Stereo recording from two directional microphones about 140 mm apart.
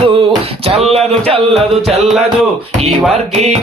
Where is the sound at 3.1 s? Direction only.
50° right (ahead or behind).